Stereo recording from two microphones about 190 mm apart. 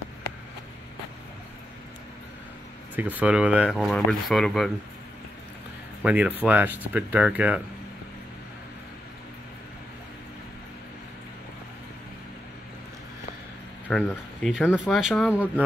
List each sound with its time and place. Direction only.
3.0 s speech: 10° right (ahead or behind)
6.0 s speech: 5° right (ahead or behind)
13.8 s speech: centre (ahead or behind)